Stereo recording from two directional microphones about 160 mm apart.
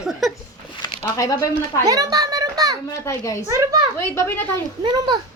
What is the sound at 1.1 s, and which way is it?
Speech, 20° left (ahead or behind).